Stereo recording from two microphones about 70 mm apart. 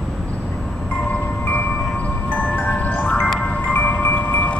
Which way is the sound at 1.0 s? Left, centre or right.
Left.